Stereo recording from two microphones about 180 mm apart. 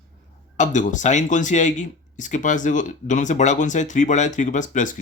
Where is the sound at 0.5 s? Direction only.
45° left (ahead or behind).